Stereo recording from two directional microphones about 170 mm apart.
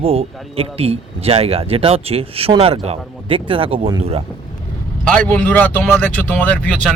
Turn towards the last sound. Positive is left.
turn(degrees=10)  # may be behind; listen again after turning